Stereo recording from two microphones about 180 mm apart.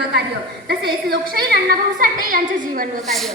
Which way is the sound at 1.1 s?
60° right (ahead or behind).